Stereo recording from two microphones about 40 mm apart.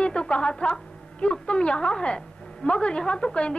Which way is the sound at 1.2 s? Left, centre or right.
Left.